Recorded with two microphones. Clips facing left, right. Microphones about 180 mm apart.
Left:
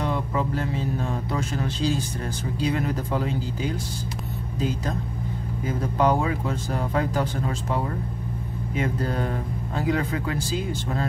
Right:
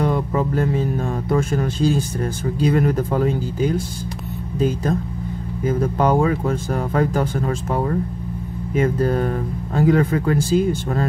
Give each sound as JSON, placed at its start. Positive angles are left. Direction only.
{"t": 0.0, "sound": "music", "side_deg": -45}
{"t": 1.3, "sound": "speech", "side_deg": -50}
{"t": 5.9, "sound": "speech", "side_deg": -50}
{"t": 8.7, "sound": "speech", "side_deg": -50}